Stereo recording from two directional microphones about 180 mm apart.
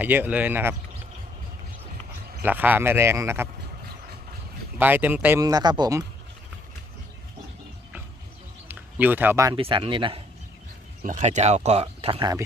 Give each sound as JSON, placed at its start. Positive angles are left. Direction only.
{"t": 0.0, "sound": "speech", "side_deg": -10}
{"t": 2.4, "sound": "speech", "side_deg": -10}
{"t": 4.8, "sound": "speech", "side_deg": -10}
{"t": 8.6, "sound": "run", "side_deg": -10}
{"t": 9.6, "sound": "speech", "side_deg": -30}
{"t": 11.0, "sound": "speech", "side_deg": -45}